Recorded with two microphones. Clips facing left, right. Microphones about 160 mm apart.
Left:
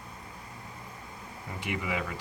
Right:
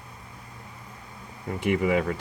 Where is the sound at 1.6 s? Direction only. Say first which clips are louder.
Right 10 dB; 50° right (ahead or behind).